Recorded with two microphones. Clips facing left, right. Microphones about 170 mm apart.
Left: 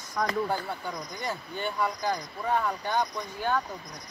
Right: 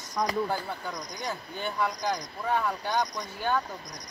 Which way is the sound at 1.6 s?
5° left (ahead or behind).